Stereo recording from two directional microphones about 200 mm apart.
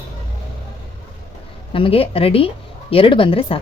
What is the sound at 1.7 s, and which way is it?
A woman's voice, 25° left (ahead or behind).